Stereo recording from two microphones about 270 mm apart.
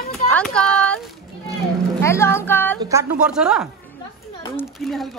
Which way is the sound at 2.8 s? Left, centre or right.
Centre.